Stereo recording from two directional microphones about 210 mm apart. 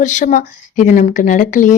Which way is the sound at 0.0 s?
35° left (ahead or behind).